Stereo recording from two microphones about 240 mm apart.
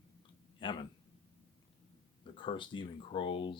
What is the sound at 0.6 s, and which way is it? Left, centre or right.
Speech, centre.